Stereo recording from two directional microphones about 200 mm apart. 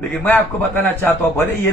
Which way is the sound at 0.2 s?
10° left (ahead or behind).